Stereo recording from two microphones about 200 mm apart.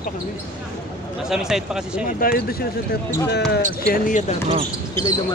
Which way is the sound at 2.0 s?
50° left (ahead or behind).